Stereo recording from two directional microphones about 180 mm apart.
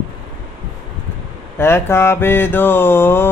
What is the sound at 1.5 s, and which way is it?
Mantra, 15° left (ahead or behind).